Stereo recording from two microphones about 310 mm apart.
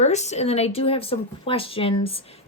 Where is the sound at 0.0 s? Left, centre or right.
Left.